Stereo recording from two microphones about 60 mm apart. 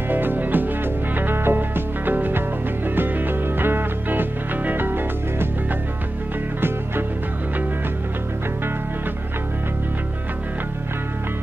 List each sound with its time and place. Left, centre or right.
0.1 s music: right